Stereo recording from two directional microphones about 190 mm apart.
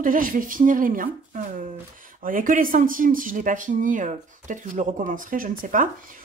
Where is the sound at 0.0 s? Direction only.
45° right (ahead or behind).